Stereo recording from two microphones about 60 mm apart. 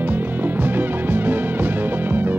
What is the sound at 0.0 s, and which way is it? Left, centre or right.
Music, right.